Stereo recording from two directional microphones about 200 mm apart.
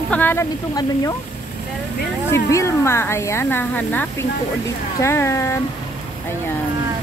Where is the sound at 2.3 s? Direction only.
15° left (ahead or behind).